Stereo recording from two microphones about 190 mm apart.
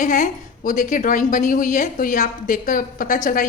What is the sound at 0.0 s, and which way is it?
A woman's voice, 40° left (ahead or behind).